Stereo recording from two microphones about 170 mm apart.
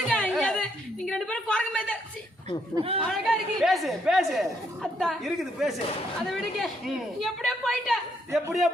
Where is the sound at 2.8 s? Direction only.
35° right (ahead or behind).